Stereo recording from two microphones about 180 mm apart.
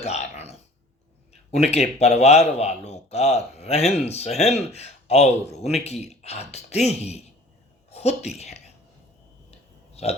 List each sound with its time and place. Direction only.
0.0 s a sound: 35° left (ahead or behind)
1.3 s a man's voice: 35° left (ahead or behind)
9.5 s burping: 35° left (ahead or behind)